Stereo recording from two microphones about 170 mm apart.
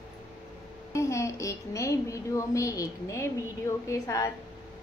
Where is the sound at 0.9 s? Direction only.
20° left (ahead or behind).